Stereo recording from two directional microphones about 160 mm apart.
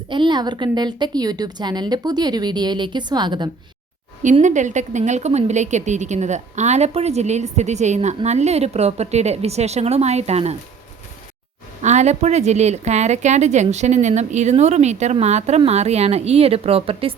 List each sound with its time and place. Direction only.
0.1 s a woman's voice: 30° right (ahead or behind)
4.2 s speech: 50° right (ahead or behind)
11.8 s speech: 45° right (ahead or behind)